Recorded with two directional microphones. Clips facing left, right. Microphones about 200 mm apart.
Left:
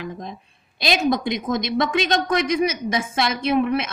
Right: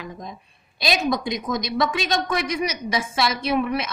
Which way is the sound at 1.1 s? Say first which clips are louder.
Left 2 dB; 55° left (ahead or behind).